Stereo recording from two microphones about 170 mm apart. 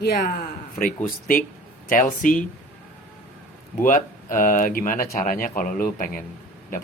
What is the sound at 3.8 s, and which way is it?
Speech, 50° left (ahead or behind).